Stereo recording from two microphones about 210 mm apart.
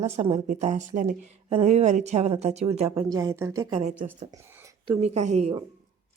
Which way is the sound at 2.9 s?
15° right (ahead or behind).